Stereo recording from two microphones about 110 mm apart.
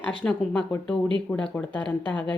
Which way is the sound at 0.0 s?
10° left (ahead or behind).